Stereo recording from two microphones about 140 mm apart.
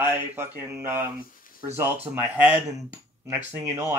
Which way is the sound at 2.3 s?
15° right (ahead or behind).